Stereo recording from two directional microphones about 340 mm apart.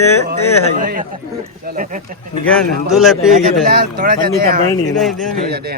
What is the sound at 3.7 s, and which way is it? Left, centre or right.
Speech, right.